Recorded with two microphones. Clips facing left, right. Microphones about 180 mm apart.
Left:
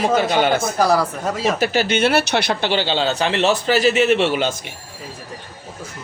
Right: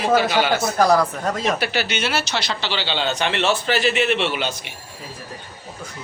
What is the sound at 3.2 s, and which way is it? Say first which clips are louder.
A man's voice: left 3 dB; 35° left (ahead or behind).